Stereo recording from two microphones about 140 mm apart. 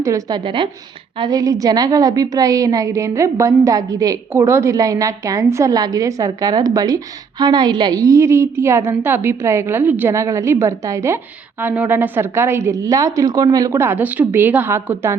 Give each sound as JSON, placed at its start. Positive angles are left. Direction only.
{"t": 0.0, "sound": "a woman's voice", "side_deg": -25}